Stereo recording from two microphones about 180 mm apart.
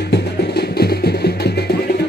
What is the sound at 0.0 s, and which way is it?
Music, 65° left (ahead or behind).